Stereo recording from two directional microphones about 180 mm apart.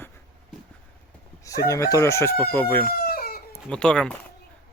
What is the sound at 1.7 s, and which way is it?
Speech, 20° left (ahead or behind).